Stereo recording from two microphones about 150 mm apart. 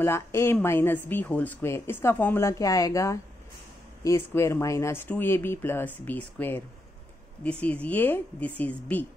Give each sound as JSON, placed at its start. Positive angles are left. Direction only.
{"t": 0.0, "sound": "speech", "side_deg": 15}
{"t": 7.6, "sound": "speech", "side_deg": 10}